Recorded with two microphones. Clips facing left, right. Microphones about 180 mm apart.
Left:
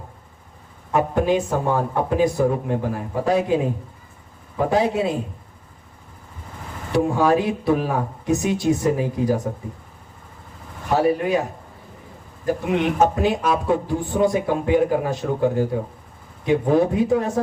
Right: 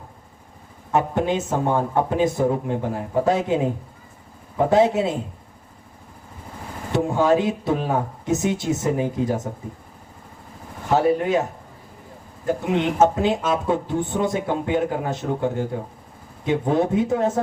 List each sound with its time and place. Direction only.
0.9 s a man's voice: 25° right (ahead or behind)
4.7 s a man's voice: 20° right (ahead or behind)
6.9 s a man's voice: 25° right (ahead or behind)
10.9 s a man's voice: 25° right (ahead or behind)
12.5 s a man's voice: 25° right (ahead or behind)